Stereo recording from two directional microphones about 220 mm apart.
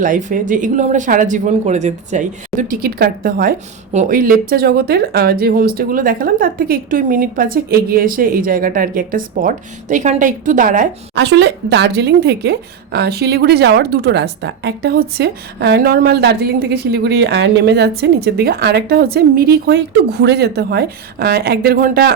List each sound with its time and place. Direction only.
0.0 s speech: 35° right (ahead or behind)
11.2 s a woman's voice: 50° right (ahead or behind)